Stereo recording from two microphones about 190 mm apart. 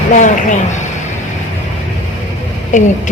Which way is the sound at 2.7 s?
40° left (ahead or behind).